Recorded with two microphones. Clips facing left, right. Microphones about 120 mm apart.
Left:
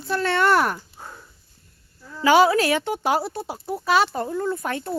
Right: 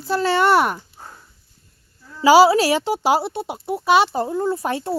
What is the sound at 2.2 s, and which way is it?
Speech, 30° right (ahead or behind).